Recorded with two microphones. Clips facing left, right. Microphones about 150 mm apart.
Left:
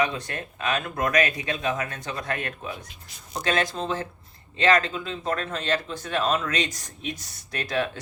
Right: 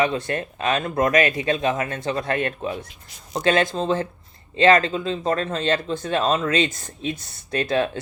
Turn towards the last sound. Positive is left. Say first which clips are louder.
# right 6 dB
turn(degrees=-30)  # may be behind; listen again after turning